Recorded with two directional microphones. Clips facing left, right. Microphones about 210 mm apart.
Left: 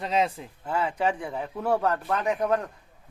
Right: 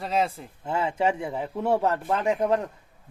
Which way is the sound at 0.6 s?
25° right (ahead or behind).